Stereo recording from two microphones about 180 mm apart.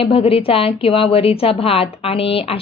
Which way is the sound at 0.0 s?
30° left (ahead or behind).